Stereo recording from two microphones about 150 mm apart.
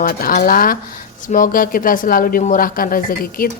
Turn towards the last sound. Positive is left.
turn(degrees=75)  # may be behind; listen again after turning